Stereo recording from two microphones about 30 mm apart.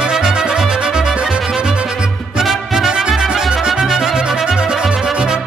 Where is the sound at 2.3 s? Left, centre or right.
Centre.